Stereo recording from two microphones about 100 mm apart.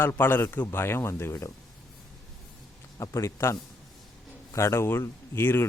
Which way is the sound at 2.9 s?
30° left (ahead or behind).